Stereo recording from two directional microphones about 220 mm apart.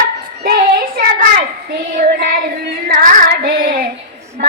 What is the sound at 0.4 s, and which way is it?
Child singing, 45° right (ahead or behind).